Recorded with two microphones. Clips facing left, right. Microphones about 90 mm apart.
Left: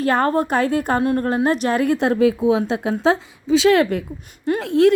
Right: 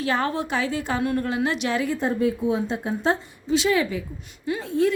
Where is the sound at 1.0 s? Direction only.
40° left (ahead or behind).